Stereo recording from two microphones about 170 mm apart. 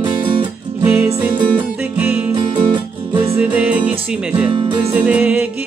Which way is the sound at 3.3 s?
10° right (ahead or behind).